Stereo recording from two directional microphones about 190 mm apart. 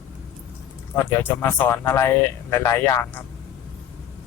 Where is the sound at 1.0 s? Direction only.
10° left (ahead or behind).